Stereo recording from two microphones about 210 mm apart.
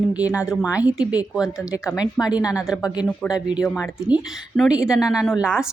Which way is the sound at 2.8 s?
15° left (ahead or behind).